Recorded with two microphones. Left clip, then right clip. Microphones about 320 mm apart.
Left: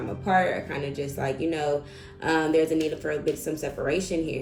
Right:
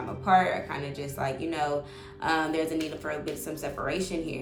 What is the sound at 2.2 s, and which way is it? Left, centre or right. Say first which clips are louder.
A woman's voice: left 4 dB; right.